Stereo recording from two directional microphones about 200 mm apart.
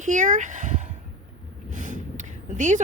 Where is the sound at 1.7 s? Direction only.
40° right (ahead or behind).